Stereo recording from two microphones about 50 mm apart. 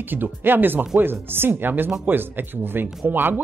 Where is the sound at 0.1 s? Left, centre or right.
Right.